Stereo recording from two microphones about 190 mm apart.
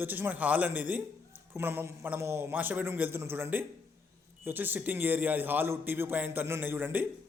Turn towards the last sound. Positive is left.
turn(degrees=-10)  # may be behind; listen again after turning